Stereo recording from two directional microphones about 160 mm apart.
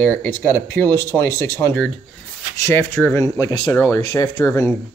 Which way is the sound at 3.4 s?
25° left (ahead or behind).